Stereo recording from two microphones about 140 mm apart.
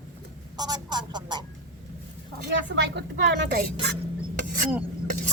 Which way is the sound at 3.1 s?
90° right.